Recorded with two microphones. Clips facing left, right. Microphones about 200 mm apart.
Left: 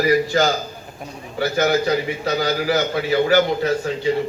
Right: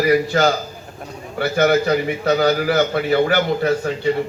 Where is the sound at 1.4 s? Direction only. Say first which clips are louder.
Right 2 dB; 55° right (ahead or behind).